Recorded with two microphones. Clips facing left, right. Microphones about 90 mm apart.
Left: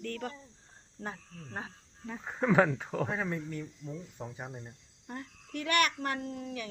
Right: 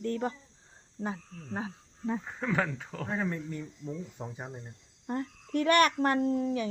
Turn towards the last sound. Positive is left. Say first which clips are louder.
# right 10 dB
turn(degrees=-30)  # may be behind; listen again after turning